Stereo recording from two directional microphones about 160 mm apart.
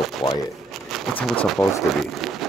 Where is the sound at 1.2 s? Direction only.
Centre (ahead or behind).